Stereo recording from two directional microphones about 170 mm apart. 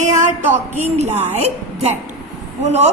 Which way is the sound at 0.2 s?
45° right (ahead or behind).